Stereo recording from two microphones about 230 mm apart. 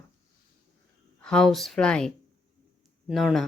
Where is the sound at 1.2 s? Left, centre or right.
Centre.